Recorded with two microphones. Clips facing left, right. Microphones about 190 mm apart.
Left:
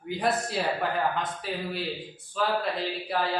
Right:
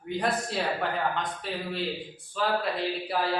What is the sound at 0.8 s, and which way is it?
Speech, 5° left (ahead or behind).